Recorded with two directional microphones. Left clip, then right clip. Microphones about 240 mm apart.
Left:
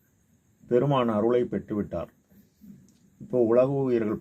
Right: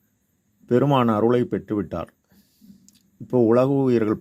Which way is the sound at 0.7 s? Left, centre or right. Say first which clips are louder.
Right 4 dB; right.